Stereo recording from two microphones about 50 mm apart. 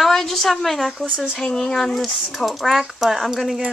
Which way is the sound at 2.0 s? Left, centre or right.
Centre.